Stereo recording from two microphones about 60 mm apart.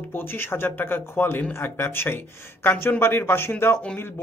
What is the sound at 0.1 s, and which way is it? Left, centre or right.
A man's voice, left.